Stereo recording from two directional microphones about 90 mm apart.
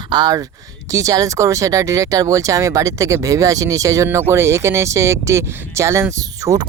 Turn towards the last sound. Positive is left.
turn(degrees=-35)  # may be behind; listen again after turning